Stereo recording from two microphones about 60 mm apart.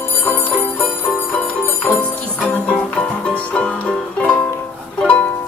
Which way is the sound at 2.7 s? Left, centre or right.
Left.